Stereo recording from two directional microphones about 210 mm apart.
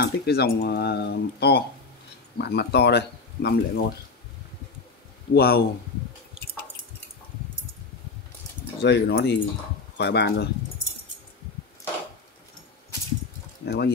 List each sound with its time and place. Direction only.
0.0 s speech: 50° left (ahead or behind)
5.3 s speech: 45° left (ahead or behind)
8.8 s speech: 55° left (ahead or behind)
13.7 s speech: 50° left (ahead or behind)